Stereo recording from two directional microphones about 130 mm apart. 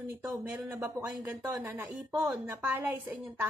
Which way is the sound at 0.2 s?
15° right (ahead or behind).